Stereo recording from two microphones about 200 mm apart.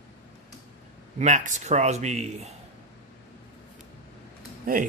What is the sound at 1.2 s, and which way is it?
Speech, 35° right (ahead or behind).